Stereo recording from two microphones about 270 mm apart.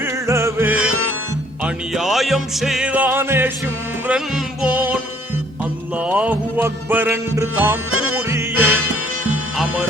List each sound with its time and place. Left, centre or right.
0.0 s music: centre
0.9 s music: right
1.6 s music: centre
4.6 s music: centre
6.0 s music: centre
7.9 s music: right
8.1 s music: centre
8.5 s music: right